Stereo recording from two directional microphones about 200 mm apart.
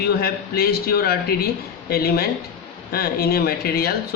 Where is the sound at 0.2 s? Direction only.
50° left (ahead or behind).